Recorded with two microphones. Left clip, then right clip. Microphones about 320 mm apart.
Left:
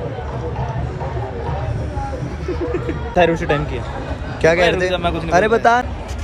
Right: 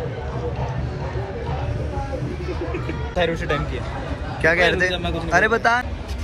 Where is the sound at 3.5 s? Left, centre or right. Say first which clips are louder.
Left 5 dB; left.